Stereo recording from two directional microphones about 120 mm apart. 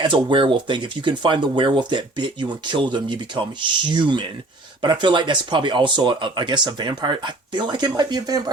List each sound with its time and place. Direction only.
0.0 s speech: 40° right (ahead or behind)